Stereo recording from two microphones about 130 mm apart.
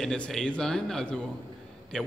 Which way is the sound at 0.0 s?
5° left (ahead or behind).